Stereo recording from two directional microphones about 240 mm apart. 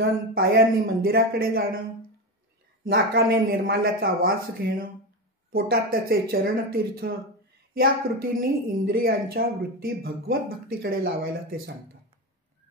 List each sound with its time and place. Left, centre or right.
0.3 s a woman's voice: right
2.8 s a woman's voice: right